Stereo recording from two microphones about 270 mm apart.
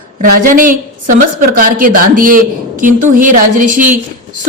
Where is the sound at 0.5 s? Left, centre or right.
Right.